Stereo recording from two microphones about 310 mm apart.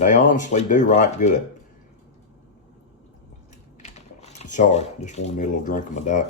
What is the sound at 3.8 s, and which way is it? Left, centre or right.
Crushing, left.